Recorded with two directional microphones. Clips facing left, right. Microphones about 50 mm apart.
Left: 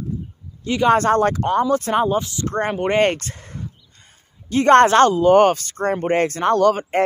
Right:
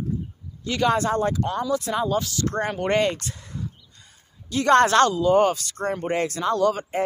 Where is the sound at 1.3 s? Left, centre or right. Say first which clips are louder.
Left 6 dB; left.